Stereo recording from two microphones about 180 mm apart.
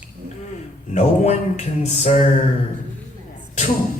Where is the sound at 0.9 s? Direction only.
40° left (ahead or behind).